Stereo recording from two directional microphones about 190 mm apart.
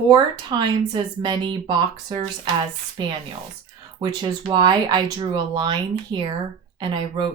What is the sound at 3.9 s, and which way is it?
Speech, 25° right (ahead or behind).